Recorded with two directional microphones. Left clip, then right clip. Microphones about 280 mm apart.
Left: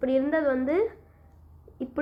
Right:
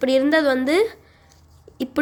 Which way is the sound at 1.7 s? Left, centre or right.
Right.